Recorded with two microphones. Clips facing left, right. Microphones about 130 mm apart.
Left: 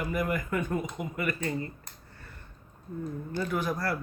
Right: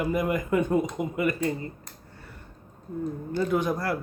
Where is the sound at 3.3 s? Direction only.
20° right (ahead or behind).